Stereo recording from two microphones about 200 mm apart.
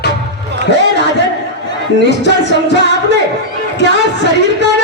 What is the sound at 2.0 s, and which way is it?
Music, 60° left (ahead or behind).